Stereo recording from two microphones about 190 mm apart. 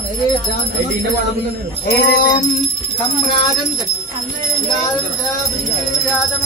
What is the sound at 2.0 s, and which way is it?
Music, 65° left (ahead or behind).